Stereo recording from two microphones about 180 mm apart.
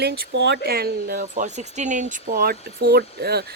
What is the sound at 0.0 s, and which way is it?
Speech, 70° right (ahead or behind).